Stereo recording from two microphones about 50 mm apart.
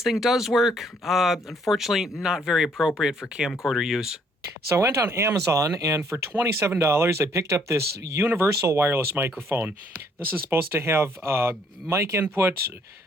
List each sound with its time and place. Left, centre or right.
0.0 s speech: centre
4.7 s speech: right
6.4 s speech: right
8.9 s speech: right